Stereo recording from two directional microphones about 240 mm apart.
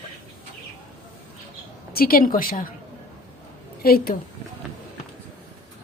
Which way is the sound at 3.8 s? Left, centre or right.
Left.